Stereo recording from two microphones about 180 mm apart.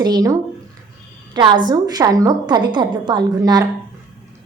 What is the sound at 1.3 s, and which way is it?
A woman's voice, 25° right (ahead or behind).